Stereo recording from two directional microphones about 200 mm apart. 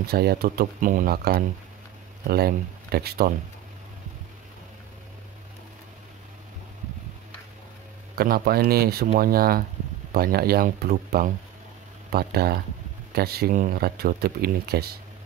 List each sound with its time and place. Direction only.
0.0 s speech: 50° right (ahead or behind)
8.2 s speech: 50° right (ahead or behind)